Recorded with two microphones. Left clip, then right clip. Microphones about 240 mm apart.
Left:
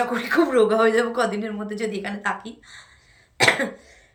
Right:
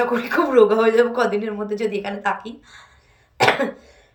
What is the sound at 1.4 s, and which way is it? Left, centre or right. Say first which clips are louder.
Speech: right 4 dB; left.